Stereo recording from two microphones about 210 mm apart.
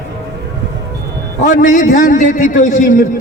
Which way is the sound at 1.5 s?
40° left (ahead or behind).